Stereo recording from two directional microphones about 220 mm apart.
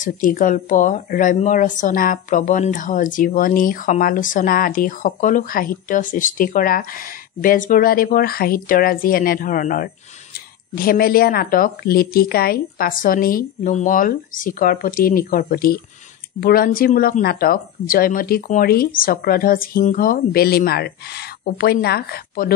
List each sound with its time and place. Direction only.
0.0 s speech: 40° left (ahead or behind)